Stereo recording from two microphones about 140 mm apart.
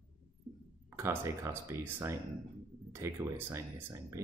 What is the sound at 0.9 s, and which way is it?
Speech, 20° right (ahead or behind).